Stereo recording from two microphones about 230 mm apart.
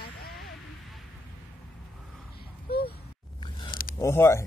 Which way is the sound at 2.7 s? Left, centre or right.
Left.